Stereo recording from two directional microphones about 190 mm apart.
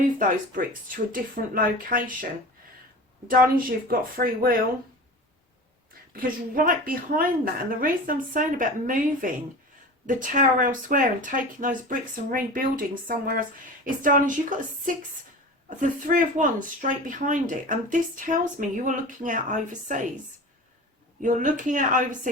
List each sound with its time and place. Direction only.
0.0 s speech: 45° right (ahead or behind)
3.2 s speech: 45° right (ahead or behind)
6.1 s speech: 45° right (ahead or behind)
21.2 s speech: 40° right (ahead or behind)